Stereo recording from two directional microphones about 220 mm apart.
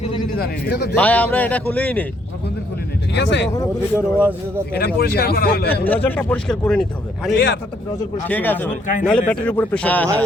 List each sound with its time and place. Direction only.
0.3 s a man's voice: 45° left (ahead or behind)
0.9 s speech: 5° left (ahead or behind)
3.1 s speech: 55° left (ahead or behind)
3.9 s speech: 5° right (ahead or behind)
4.9 s a man's voice: 45° left (ahead or behind)
5.8 s speech: 10° left (ahead or behind)
7.3 s a man's voice: 55° left (ahead or behind)
8.3 s speech: 10° left (ahead or behind)